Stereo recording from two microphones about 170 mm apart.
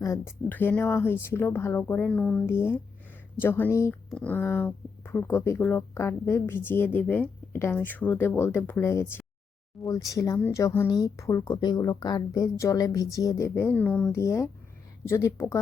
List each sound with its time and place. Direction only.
0.0 s speech: 15° left (ahead or behind)